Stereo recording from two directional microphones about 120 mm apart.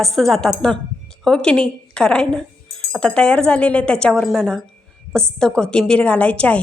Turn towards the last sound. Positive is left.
turn(degrees=10)  # may be behind; listen again after turning